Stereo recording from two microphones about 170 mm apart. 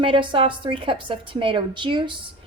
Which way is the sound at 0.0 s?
30° right (ahead or behind).